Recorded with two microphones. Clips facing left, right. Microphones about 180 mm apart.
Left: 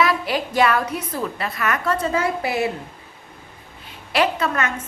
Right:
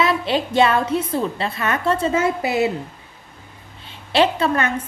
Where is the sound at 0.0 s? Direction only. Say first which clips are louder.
Right 1 dB; 25° right (ahead or behind).